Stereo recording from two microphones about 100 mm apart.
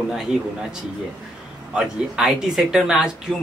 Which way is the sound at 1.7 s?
5° right (ahead or behind).